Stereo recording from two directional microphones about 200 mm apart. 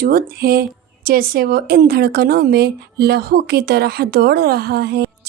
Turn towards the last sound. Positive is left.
turn(degrees=-55)  # may be behind; listen again after turning